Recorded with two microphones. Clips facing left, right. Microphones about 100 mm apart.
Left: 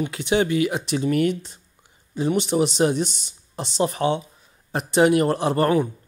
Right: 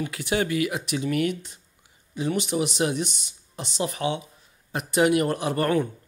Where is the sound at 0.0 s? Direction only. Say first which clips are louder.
Left 4 dB; 25° left (ahead or behind).